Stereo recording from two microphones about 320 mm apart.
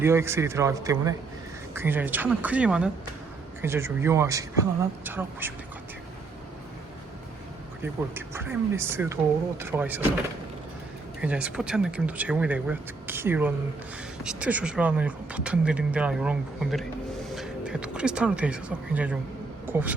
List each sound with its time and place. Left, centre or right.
0.0 s speech: centre
8.1 s speech: centre
11.2 s speech: centre